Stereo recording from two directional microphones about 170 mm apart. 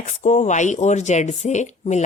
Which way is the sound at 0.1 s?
45° left (ahead or behind).